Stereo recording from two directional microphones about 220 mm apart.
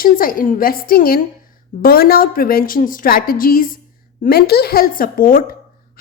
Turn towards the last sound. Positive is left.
turn(degrees=40)  # may be behind; listen again after turning